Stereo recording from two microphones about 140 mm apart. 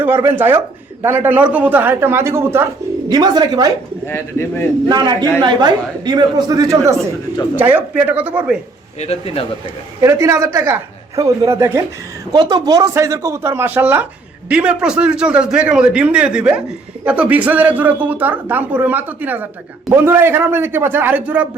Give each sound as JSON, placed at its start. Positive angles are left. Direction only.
{"t": 0.0, "sound": "a man's voice", "side_deg": -15}
{"t": 3.1, "sound": "speech", "side_deg": -30}
{"t": 4.0, "sound": "speech", "side_deg": 15}
{"t": 4.9, "sound": "speech", "side_deg": -30}
{"t": 7.5, "sound": "a man's voice", "side_deg": -10}
{"t": 9.0, "sound": "speech", "side_deg": 45}
{"t": 10.0, "sound": "a man's voice", "side_deg": -20}